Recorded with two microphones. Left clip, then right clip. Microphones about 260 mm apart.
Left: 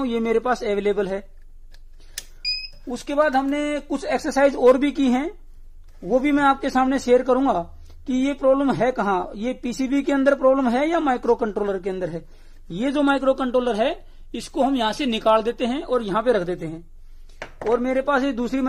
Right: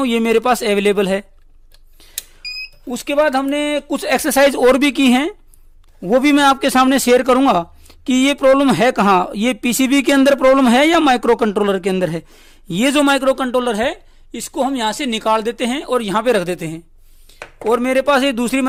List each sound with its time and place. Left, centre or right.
0.0 s a man's voice: right
2.9 s a man's voice: right